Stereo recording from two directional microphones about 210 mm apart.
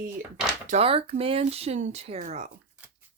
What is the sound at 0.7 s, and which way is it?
Speech, 30° right (ahead or behind).